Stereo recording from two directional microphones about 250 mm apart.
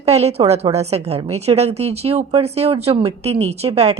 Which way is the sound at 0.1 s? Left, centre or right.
Right.